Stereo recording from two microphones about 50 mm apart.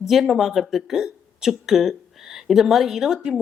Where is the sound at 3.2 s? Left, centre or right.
Right.